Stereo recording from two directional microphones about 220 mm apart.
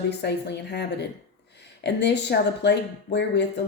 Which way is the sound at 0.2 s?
50° left (ahead or behind).